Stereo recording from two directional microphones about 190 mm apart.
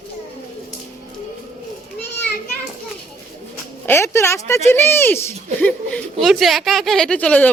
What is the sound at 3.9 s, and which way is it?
Speech, 15° left (ahead or behind).